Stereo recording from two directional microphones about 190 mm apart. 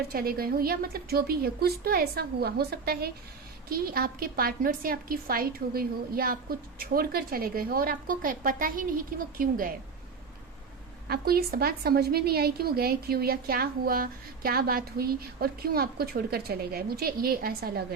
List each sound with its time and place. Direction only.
0.1 s a woman's voice: 50° right (ahead or behind)
11.1 s a woman's voice: 55° right (ahead or behind)